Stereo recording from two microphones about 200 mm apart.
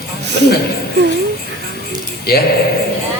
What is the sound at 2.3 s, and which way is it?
Speech, 50° left (ahead or behind).